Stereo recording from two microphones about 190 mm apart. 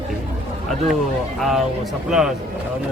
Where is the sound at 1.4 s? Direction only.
Centre (ahead or behind).